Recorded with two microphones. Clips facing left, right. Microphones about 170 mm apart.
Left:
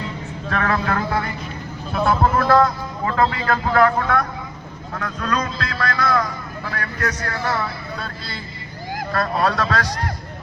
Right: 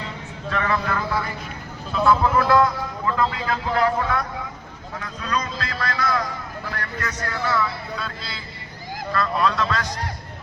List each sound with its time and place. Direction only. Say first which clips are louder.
0.5 s vehicle: left 2 dB; 60° left (ahead or behind)
1.9 s a sound: even; 55° left (ahead or behind)
3.2 s a man's voice: left 6 dB; 65° left (ahead or behind)
4.9 s vehicle: left 4 dB; 60° left (ahead or behind)
6.7 s a man's voice: left 5 dB; 60° left (ahead or behind)